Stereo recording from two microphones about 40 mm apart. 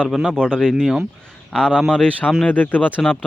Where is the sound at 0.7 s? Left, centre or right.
Centre.